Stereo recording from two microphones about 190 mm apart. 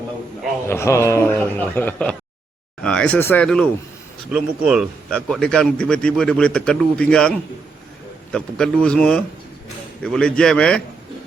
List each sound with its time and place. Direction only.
0.7 s a man's voice: 15° left (ahead or behind)